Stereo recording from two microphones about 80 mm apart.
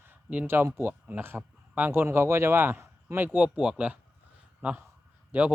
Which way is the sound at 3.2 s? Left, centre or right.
Centre.